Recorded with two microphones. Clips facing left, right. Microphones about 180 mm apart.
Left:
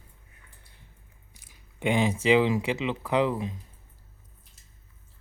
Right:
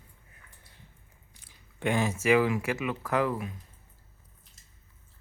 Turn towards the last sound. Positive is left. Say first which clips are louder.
# left 3 dB
turn(degrees=25)  # may be behind; listen again after turning